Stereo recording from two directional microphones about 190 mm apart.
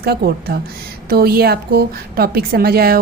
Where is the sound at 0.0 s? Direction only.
55° right (ahead or behind).